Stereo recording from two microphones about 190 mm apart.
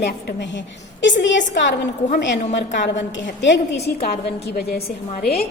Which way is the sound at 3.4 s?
65° left (ahead or behind).